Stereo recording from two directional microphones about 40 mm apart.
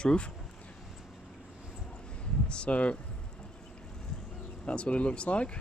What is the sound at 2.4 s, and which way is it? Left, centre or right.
Speech, left.